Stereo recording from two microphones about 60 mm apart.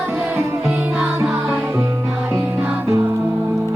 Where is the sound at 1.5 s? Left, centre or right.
Right.